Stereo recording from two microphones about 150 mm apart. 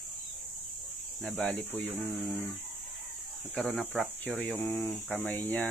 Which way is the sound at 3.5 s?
5° left (ahead or behind).